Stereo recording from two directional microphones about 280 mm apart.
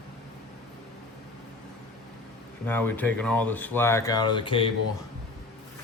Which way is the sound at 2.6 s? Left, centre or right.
Centre.